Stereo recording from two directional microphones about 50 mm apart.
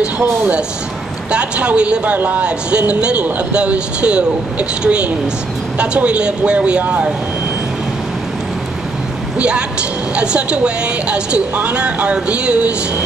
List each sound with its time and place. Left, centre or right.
0.0 s a woman's voice: right
2.1 s a woman's voice: right
9.4 s a woman's voice: right